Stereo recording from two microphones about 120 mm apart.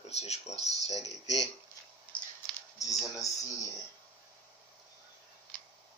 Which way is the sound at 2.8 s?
30° left (ahead or behind).